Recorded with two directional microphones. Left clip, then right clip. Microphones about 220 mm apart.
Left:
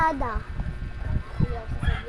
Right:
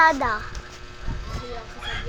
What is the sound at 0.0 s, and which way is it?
Speech, 30° right (ahead or behind).